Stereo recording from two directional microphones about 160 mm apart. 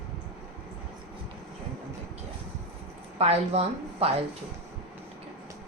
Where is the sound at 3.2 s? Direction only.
40° right (ahead or behind).